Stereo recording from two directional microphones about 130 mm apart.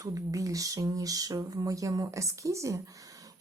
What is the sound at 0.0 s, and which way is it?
Speech, 25° right (ahead or behind).